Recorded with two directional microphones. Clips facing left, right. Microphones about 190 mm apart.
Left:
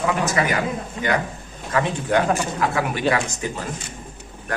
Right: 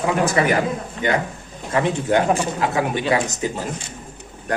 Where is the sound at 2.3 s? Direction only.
20° right (ahead or behind).